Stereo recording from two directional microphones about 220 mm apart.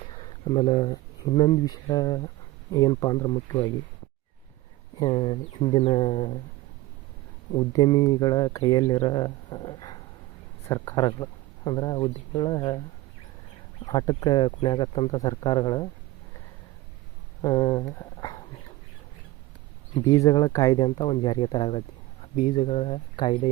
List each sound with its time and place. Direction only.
0.2 s speech: 25° left (ahead or behind)
4.9 s speech: 25° left (ahead or behind)
7.5 s speech: 20° left (ahead or behind)
13.8 s speech: 20° left (ahead or behind)
17.4 s speech: 15° left (ahead or behind)
20.1 s speech: 20° left (ahead or behind)